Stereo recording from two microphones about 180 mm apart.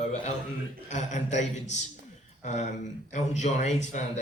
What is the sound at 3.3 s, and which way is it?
Speech, 40° left (ahead or behind).